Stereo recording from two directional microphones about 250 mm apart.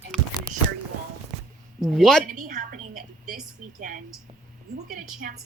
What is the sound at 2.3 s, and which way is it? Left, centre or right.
A woman's voice, right.